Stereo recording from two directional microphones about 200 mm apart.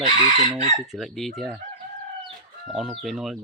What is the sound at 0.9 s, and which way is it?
Speech, centre (ahead or behind).